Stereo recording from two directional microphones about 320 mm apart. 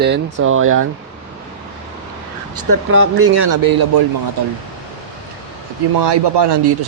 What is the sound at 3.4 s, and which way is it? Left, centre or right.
Speech, right.